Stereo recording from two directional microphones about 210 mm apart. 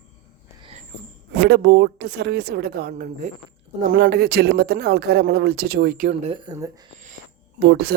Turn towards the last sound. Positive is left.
turn(degrees=-50)  # may be behind; listen again after turning